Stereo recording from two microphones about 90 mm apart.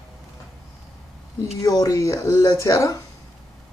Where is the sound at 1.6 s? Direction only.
40° left (ahead or behind).